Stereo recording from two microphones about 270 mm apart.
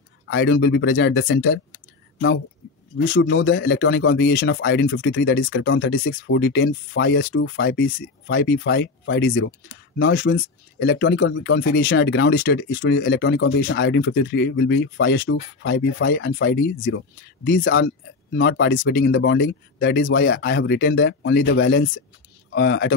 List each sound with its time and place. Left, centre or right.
0.3 s speech: left
3.0 s speech: left
17.5 s speech: left